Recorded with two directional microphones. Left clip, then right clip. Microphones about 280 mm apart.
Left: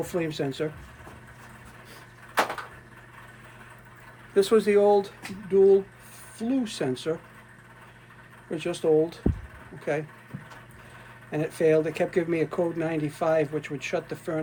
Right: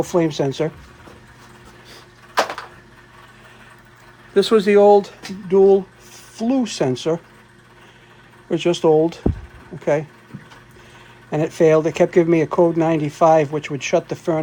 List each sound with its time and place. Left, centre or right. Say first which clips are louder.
0.0 s speech: right 10 dB; right
4.4 s speech: right 7 dB; right
5.5 s speech: right 6 dB; right
6.3 s speech: right 8 dB; right
8.4 s speech: right 9 dB; right
11.3 s speech: right 8 dB; right